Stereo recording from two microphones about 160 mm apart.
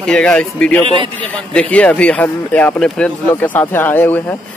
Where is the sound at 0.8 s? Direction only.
30° right (ahead or behind).